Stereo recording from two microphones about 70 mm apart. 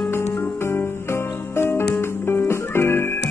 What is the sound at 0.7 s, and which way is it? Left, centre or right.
Music, left.